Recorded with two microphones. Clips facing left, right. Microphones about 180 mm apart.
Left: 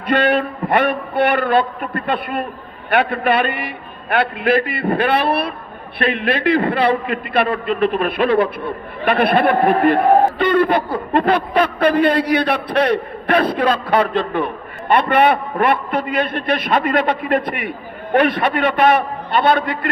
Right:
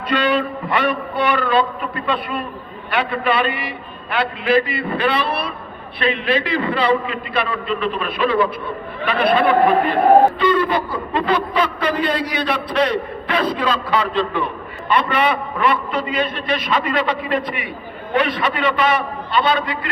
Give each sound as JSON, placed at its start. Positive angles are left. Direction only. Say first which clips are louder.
{"t": 0.1, "sound": "a man's voice", "louder": "left 3 dB", "side_deg": 55}